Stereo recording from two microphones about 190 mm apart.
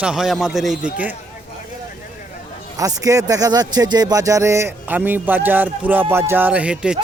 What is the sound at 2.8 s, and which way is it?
Speech, 20° right (ahead or behind).